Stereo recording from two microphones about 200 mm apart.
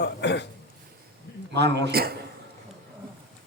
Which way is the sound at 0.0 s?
60° left (ahead or behind).